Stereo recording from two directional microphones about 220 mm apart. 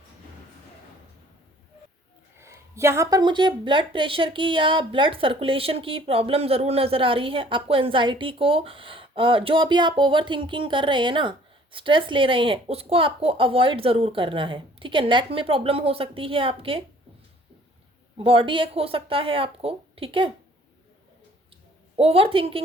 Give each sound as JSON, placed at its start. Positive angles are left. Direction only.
{"t": 2.4, "sound": "speech", "side_deg": -10}
{"t": 18.2, "sound": "speech", "side_deg": -25}
{"t": 21.9, "sound": "speech", "side_deg": -25}